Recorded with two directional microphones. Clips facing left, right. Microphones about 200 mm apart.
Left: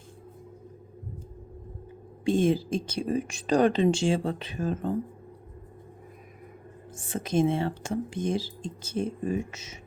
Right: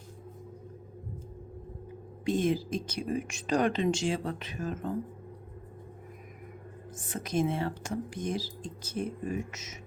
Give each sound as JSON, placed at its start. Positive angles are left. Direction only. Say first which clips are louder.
{"t": 2.2, "sound": "speech", "louder": "left 4 dB", "side_deg": 30}
{"t": 6.9, "sound": "speech", "louder": "left 4 dB", "side_deg": 25}